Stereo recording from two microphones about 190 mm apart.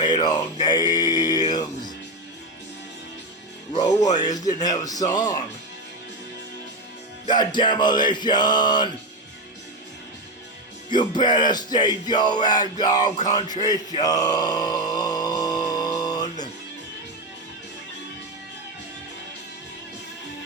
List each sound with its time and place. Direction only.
0.0 s a sound: 25° left (ahead or behind)
0.6 s mantra: 20° left (ahead or behind)
3.8 s music: 20° left (ahead or behind)
7.3 s music: 25° left (ahead or behind)
10.9 s music: 20° left (ahead or behind)
13.2 s a sound: 20° left (ahead or behind)